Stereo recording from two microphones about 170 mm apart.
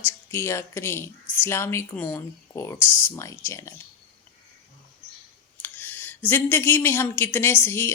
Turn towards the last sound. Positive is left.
turn(degrees=15)  # may be behind; listen again after turning